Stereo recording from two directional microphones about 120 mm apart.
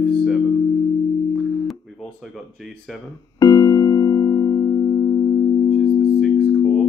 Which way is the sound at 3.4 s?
35° left (ahead or behind).